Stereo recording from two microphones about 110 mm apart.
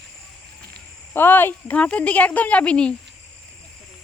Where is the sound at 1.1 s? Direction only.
20° left (ahead or behind).